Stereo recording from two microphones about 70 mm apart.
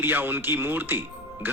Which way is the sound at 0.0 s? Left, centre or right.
Right.